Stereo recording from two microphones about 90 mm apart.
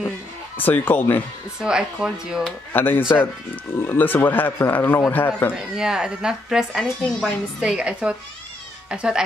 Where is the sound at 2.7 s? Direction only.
20° left (ahead or behind).